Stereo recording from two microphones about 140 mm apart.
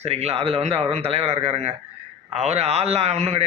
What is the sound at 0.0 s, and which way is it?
A man's voice, 50° right (ahead or behind).